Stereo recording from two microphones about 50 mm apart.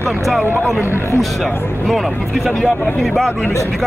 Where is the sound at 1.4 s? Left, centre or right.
Centre.